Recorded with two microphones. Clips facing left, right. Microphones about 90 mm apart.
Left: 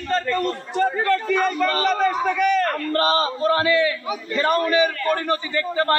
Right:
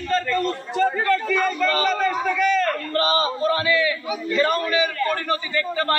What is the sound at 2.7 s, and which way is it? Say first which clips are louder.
A man's voice: left 1 dB; 40° left (ahead or behind).